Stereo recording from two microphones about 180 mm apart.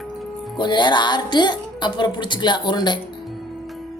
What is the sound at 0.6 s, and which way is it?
A woman's voice, 25° left (ahead or behind).